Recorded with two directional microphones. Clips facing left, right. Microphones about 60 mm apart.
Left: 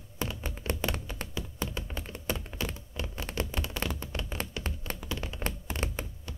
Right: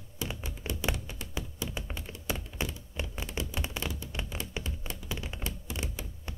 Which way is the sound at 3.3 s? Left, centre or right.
Left.